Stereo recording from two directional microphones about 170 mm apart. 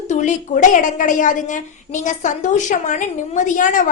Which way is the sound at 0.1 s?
45° left (ahead or behind).